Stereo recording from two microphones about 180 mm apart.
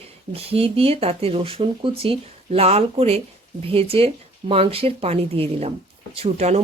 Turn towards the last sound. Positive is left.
turn(degrees=-35)  # may be behind; listen again after turning